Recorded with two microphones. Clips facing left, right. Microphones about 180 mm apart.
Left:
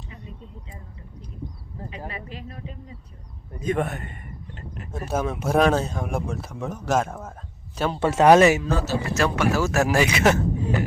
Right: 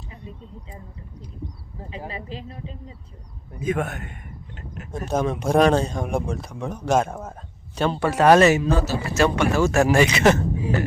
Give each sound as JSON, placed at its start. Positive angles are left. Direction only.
{"t": 2.0, "sound": "speech", "side_deg": -25}
{"t": 3.6, "sound": "speech", "side_deg": 0}
{"t": 7.9, "sound": "speech", "side_deg": 20}
{"t": 8.6, "sound": "speech", "side_deg": -15}
{"t": 9.1, "sound": "speech", "side_deg": 0}